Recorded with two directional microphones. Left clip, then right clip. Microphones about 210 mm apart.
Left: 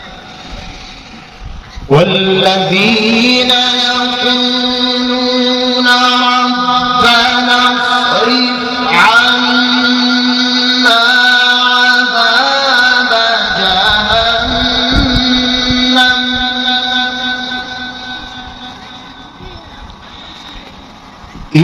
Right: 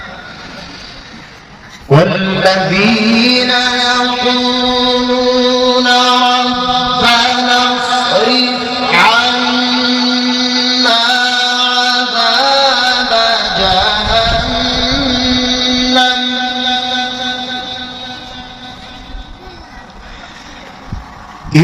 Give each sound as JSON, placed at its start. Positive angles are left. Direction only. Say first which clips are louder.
{"t": 2.1, "sound": "music", "louder": "left 1 dB", "side_deg": 15}
{"t": 5.8, "sound": "a sound", "louder": "left 4 dB", "side_deg": -15}
{"t": 7.9, "sound": "chant", "louder": "left 1 dB", "side_deg": -25}